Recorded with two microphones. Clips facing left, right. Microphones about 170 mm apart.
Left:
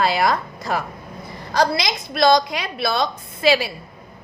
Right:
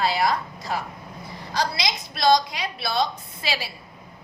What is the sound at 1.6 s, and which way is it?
Speech, 50° left (ahead or behind).